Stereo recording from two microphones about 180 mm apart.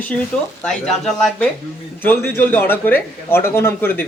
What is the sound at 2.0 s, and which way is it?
Speech, 10° left (ahead or behind).